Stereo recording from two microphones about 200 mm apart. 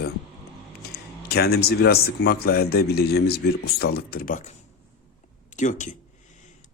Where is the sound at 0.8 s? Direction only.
50° left (ahead or behind).